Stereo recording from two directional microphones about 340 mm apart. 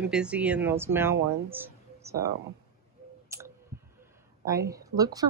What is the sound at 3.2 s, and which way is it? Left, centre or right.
Speech, centre.